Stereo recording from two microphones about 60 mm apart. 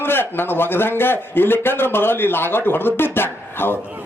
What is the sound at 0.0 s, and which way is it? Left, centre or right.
Speech, left.